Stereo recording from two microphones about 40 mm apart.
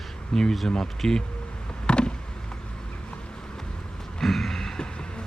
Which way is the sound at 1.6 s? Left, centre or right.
Left.